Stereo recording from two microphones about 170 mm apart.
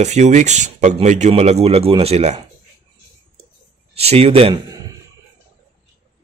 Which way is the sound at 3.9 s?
35° right (ahead or behind).